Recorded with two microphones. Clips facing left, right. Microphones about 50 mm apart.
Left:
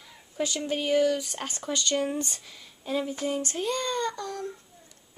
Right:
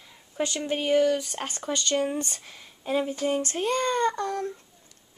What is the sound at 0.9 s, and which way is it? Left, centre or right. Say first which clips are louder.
Speech: right 2 dB; centre.